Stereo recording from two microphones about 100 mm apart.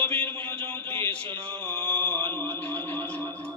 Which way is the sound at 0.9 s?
15° left (ahead or behind).